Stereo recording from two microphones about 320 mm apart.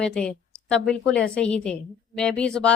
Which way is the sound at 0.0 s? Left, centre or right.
Centre.